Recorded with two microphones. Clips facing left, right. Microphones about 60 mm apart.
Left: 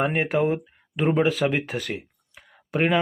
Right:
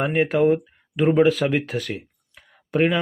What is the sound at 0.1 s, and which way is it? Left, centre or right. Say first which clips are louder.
Speech: right 4 dB; centre.